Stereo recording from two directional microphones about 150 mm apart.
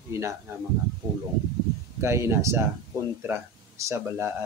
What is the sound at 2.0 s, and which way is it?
Speech, 20° right (ahead or behind).